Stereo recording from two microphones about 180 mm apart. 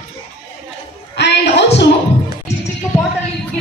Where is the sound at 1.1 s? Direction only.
70° left (ahead or behind).